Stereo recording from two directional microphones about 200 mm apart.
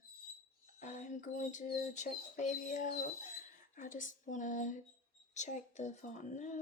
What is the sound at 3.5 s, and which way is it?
Speech, 40° left (ahead or behind).